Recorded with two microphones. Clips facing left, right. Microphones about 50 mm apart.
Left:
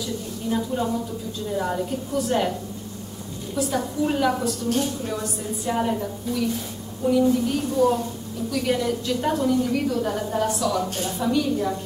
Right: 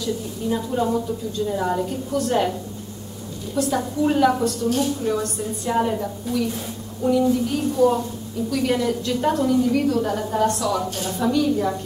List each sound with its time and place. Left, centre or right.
0.0 s a woman's voice: centre
3.7 s a woman's voice: centre
5.7 s a woman's voice: centre